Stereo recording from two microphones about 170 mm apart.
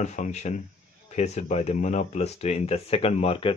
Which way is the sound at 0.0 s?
45° left (ahead or behind).